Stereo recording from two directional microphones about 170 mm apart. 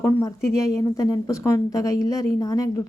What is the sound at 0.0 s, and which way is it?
A woman's voice, 15° left (ahead or behind).